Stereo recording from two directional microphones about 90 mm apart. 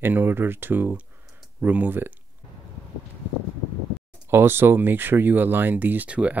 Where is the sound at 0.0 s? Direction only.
20° right (ahead or behind).